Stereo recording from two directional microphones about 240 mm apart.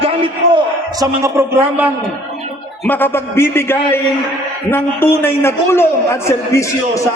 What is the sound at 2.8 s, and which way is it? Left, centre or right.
A man's voice, centre.